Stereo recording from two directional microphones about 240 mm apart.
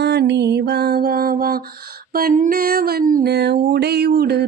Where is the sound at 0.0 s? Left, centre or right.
Right.